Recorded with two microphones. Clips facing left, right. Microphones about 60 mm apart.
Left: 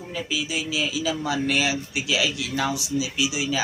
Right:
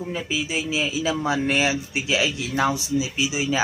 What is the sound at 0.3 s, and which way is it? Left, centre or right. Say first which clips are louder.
A man's voice: right 1 dB; right.